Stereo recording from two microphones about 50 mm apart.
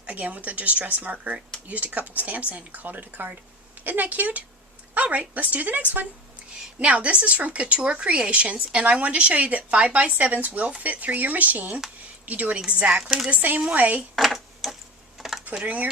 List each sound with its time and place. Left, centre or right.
0.0 s speech: right
13.0 s speech: centre
13.3 s speech: right
14.2 s a sound: centre
15.6 s speech: right